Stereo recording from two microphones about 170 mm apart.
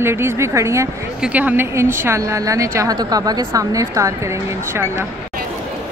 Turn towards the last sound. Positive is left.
turn(degrees=-15)  # may be behind; listen again after turning